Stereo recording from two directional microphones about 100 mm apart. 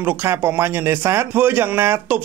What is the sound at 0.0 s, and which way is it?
Speech, 20° right (ahead or behind).